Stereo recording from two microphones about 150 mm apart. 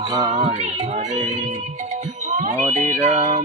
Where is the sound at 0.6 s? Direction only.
50° right (ahead or behind).